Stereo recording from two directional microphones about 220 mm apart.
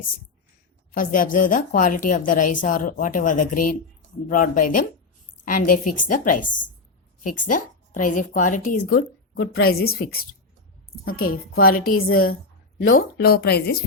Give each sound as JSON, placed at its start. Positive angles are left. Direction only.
{"t": 0.9, "sound": "a woman's voice", "side_deg": 40}
{"t": 11.0, "sound": "a woman's voice", "side_deg": 40}